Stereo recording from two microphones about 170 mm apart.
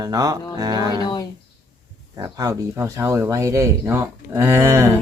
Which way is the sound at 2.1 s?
20° right (ahead or behind).